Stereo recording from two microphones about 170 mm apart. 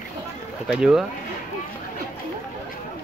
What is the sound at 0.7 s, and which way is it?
Speech, 5° right (ahead or behind).